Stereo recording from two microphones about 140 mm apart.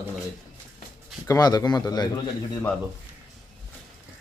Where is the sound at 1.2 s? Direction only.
25° left (ahead or behind).